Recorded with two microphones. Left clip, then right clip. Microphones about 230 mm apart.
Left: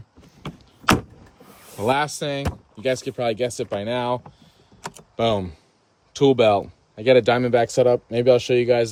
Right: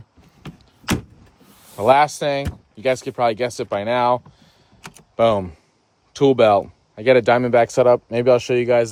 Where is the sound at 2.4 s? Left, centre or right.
Centre.